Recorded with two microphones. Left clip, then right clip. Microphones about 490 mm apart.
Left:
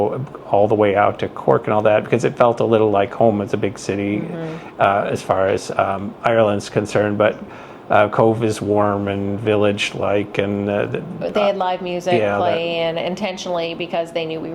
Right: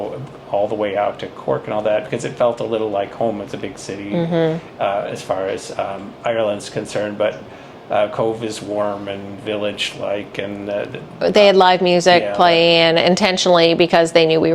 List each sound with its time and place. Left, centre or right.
0.5 s speech: left
11.2 s a woman's voice: right